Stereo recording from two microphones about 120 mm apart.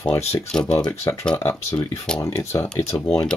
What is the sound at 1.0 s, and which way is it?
Speech, 25° left (ahead or behind).